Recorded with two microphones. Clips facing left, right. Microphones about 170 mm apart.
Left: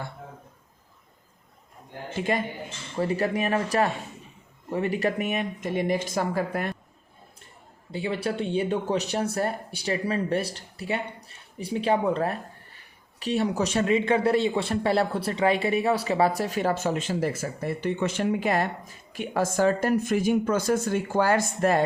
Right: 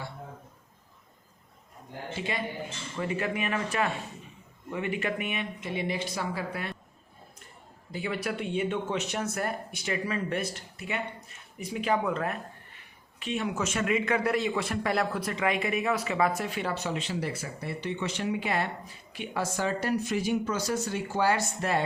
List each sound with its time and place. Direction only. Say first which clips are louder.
2.1 s speech: left 8 dB; 45° left (ahead or behind)
2.9 s speech: left 6 dB; 35° left (ahead or behind)
7.9 s speech: left 4 dB; 25° left (ahead or behind); by 21.8 s 45° left (ahead or behind)